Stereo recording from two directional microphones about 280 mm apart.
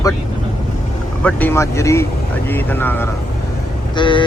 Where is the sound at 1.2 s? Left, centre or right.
Centre.